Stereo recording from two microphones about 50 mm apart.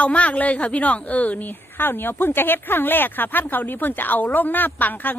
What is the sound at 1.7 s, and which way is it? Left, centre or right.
Speech, left.